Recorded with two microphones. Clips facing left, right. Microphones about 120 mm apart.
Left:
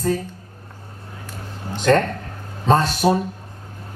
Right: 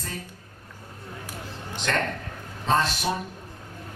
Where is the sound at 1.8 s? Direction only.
40° left (ahead or behind).